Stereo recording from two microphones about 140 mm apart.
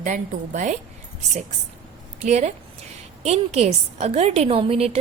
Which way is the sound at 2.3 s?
50° right (ahead or behind).